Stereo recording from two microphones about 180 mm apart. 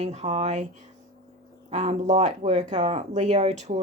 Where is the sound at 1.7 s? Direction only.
40° right (ahead or behind).